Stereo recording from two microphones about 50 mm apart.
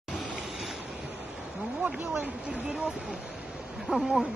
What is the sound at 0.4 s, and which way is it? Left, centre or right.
Waves, centre.